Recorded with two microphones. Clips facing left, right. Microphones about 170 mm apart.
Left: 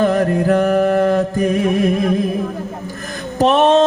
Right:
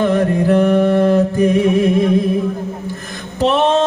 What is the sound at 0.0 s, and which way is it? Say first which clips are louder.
Mantra: even; 40° left (ahead or behind).